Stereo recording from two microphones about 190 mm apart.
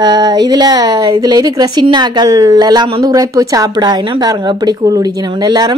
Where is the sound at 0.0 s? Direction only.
20° right (ahead or behind).